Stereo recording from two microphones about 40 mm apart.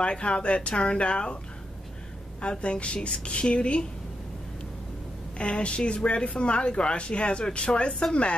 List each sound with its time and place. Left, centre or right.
0.0 s a woman's voice: left
2.4 s a woman's voice: left
5.4 s a woman's voice: left